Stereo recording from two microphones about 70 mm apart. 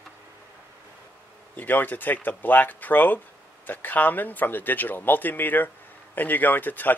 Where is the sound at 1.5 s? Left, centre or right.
Left.